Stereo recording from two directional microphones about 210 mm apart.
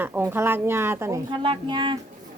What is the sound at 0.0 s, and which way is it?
Speech, 10° right (ahead or behind).